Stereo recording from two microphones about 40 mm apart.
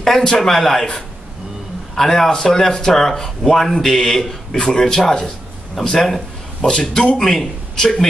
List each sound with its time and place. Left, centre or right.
0.0 s a man's voice: centre
2.0 s a man's voice: centre
5.9 s a sound: centre
6.7 s a man's voice: centre
7.2 s a man's voice: centre